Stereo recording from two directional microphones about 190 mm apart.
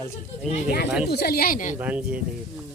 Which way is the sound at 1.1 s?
55° left (ahead or behind).